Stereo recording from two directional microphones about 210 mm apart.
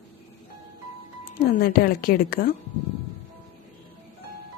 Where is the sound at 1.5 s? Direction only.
45° left (ahead or behind).